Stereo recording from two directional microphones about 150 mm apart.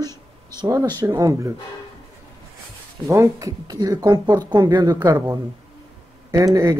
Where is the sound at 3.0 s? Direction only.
20° right (ahead or behind).